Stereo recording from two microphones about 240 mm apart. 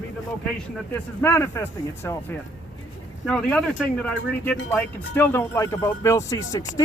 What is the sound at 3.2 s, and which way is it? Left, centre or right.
Speech, centre.